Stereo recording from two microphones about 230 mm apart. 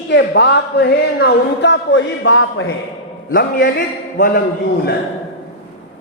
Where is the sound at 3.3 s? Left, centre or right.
Left.